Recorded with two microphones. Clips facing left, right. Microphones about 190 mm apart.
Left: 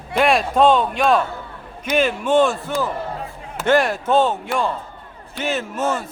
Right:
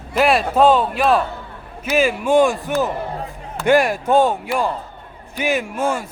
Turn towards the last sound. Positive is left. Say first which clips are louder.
# right 1 dB
turn(degrees=-10)  # may be behind; listen again after turning